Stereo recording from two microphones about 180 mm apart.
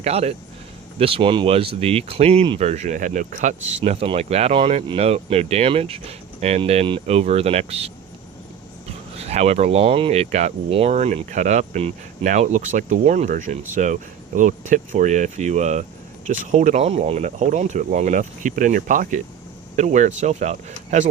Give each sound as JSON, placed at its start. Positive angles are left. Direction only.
{"t": 0.0, "sound": "speech", "side_deg": -35}
{"t": 3.8, "sound": "speech", "side_deg": -35}
{"t": 8.9, "sound": "speech", "side_deg": -35}